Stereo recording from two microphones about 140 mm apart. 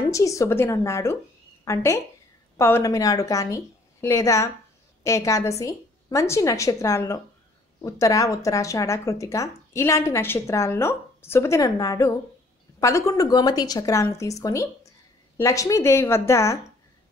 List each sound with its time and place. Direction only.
0.1 s a woman's voice: 25° left (ahead or behind)